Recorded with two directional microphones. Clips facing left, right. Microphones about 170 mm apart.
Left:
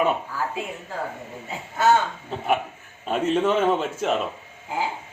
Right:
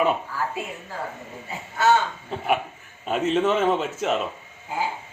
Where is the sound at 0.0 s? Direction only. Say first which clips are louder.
Even; 5° left (ahead or behind).